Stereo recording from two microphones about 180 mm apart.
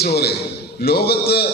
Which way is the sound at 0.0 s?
60° left (ahead or behind).